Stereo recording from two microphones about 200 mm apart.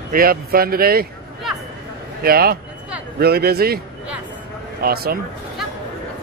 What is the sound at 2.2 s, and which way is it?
Speech, 50° right (ahead or behind).